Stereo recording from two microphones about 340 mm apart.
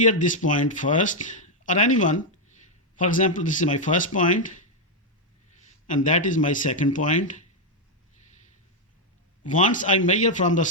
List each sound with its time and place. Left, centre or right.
0.0 s speech: left
5.9 s speech: left
9.5 s speech: left